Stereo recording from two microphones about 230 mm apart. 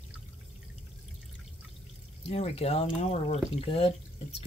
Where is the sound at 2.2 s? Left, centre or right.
Left.